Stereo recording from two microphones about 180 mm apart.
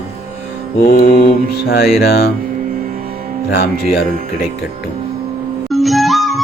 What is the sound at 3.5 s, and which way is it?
Mantra, 60° left (ahead or behind).